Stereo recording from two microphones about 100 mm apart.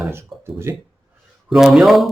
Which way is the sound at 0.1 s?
25° right (ahead or behind).